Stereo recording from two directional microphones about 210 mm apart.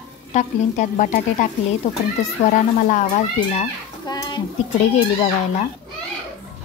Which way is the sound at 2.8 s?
35° left (ahead or behind).